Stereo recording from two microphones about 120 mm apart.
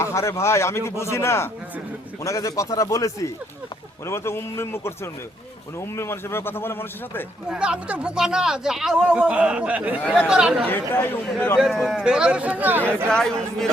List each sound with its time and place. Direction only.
0.0 s speech: 25° left (ahead or behind)
7.5 s speech: 10° right (ahead or behind)
10.7 s speech: 15° left (ahead or behind)
11.5 s speech: centre (ahead or behind)
13.1 s speech: 5° left (ahead or behind)